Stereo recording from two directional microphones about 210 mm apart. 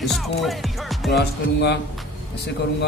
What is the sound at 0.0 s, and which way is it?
Speech, centre (ahead or behind).